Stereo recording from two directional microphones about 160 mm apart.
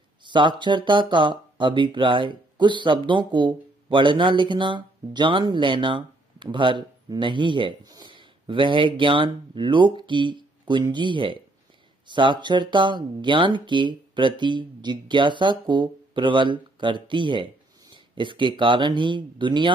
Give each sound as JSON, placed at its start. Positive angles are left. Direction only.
{"t": 0.2, "sound": "speech", "side_deg": -30}